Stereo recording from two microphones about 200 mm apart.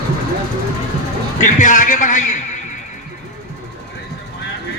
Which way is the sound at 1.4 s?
40° left (ahead or behind).